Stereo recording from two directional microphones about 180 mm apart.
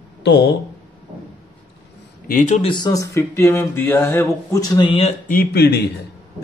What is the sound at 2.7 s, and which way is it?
Speech, 20° left (ahead or behind).